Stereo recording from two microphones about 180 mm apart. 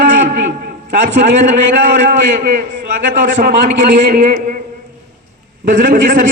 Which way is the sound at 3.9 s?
45° right (ahead or behind).